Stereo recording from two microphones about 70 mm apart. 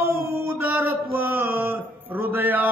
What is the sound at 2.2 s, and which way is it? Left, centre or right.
Speech, right.